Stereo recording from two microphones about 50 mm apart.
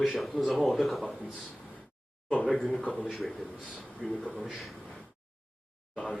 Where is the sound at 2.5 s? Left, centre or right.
Centre.